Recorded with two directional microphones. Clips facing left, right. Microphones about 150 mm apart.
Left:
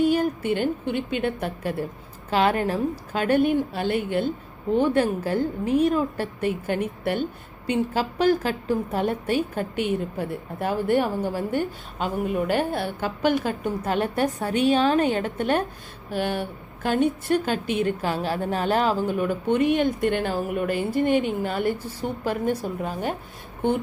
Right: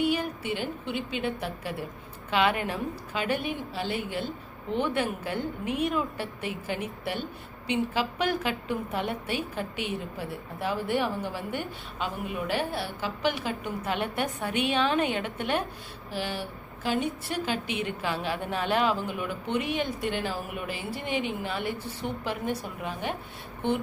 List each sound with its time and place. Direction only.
0.0 s a woman's voice: 45° left (ahead or behind)
2.3 s a woman's voice: 40° left (ahead or behind)
4.7 s a woman's voice: 40° left (ahead or behind)
7.7 s a woman's voice: 40° left (ahead or behind)